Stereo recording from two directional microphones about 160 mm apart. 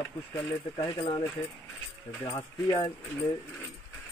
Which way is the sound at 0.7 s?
30° left (ahead or behind).